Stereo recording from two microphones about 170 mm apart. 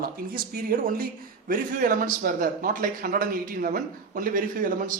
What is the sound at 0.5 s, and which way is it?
A man's voice, 60° right (ahead or behind).